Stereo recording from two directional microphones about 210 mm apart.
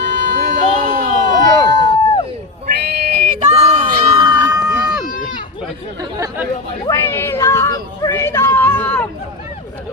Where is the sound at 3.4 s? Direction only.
30° right (ahead or behind).